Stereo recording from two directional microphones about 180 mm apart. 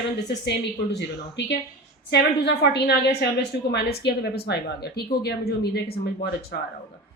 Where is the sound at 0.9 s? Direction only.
75° left (ahead or behind).